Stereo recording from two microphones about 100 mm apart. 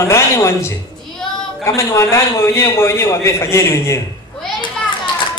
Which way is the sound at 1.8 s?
25° left (ahead or behind).